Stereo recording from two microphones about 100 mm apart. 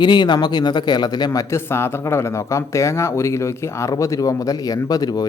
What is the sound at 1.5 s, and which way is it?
Speech, 25° left (ahead or behind).